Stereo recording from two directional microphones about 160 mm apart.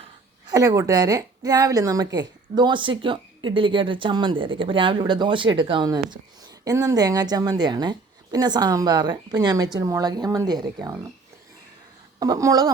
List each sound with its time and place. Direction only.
0.4 s a woman's voice: 25° right (ahead or behind)
12.2 s a woman's voice: 20° right (ahead or behind)